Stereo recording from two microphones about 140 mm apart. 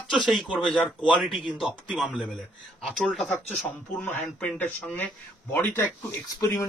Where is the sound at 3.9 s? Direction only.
15° left (ahead or behind).